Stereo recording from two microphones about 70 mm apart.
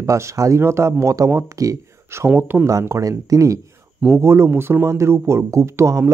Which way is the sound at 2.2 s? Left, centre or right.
Right.